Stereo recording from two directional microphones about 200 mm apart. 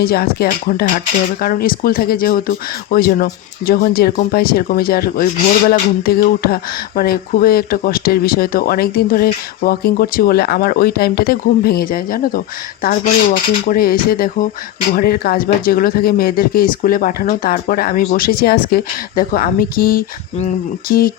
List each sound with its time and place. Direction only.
0.0 s speech: 50° left (ahead or behind)
13.7 s speech: 45° left (ahead or behind)